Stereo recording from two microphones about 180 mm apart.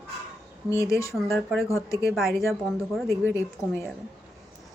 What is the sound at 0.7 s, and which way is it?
Speech, 15° left (ahead or behind).